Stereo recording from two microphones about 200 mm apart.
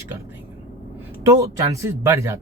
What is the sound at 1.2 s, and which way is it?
Speech, 15° right (ahead or behind).